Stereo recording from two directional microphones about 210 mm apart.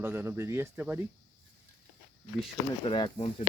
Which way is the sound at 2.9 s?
25° left (ahead or behind).